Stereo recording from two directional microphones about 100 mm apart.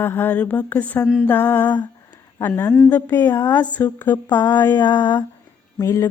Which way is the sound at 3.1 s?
30° left (ahead or behind).